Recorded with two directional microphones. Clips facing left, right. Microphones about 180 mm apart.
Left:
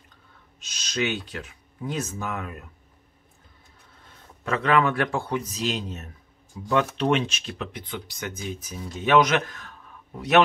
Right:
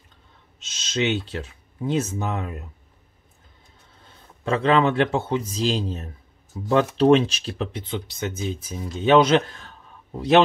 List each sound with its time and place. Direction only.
0.6 s speech: 25° right (ahead or behind)
4.5 s speech: 25° right (ahead or behind)